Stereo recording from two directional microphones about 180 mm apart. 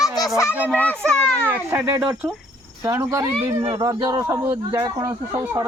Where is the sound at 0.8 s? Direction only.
10° left (ahead or behind).